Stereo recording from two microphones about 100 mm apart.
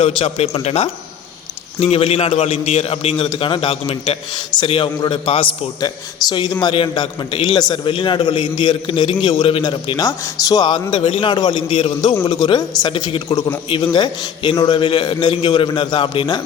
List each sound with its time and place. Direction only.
0.0 s speech: 80° left
1.8 s a man's voice: 80° left; by 5.5 s 60° left (ahead or behind)
5.8 s a man's voice: 40° left (ahead or behind)
12.9 s a man's voice: 55° left (ahead or behind)